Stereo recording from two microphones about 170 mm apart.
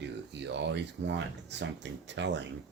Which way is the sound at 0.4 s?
90° right.